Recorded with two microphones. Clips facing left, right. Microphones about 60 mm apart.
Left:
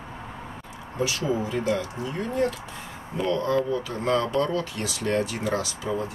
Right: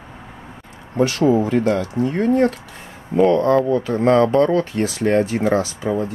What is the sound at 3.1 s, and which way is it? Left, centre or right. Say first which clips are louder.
Speech: right 10 dB; right.